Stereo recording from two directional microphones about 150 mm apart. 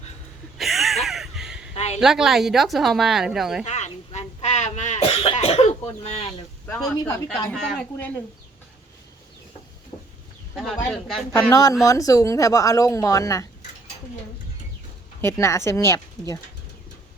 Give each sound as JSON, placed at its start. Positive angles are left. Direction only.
{"t": 0.6, "sound": "a sound", "side_deg": 0}
{"t": 1.7, "sound": "a sound", "side_deg": 45}
{"t": 2.0, "sound": "a woman's voice", "side_deg": -5}
{"t": 3.7, "sound": "throat clearing", "side_deg": 50}
{"t": 5.0, "sound": "cough", "side_deg": 40}
{"t": 6.7, "sound": "a woman's voice", "side_deg": 15}
{"t": 10.5, "sound": "a woman's voice", "side_deg": 0}
{"t": 11.5, "sound": "speech", "side_deg": 25}
{"t": 15.2, "sound": "speech", "side_deg": 15}